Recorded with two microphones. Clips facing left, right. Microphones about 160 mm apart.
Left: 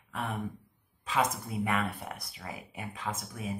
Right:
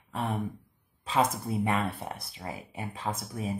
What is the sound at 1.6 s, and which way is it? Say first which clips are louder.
Speech: right 1 dB; 30° right (ahead or behind).